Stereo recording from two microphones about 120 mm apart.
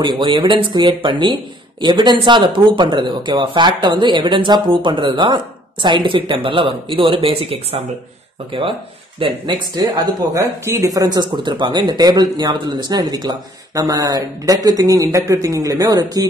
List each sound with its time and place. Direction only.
0.0 s speech: 40° right (ahead or behind)
9.5 s speech: 35° right (ahead or behind)